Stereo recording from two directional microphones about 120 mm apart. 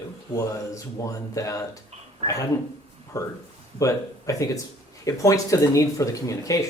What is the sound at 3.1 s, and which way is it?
Speech, 30° left (ahead or behind).